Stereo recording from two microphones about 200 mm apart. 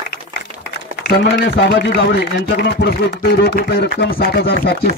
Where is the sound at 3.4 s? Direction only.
50° left (ahead or behind).